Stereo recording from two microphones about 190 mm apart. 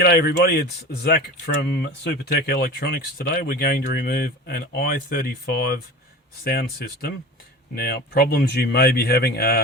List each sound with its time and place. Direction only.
0.0 s speech: 55° left (ahead or behind)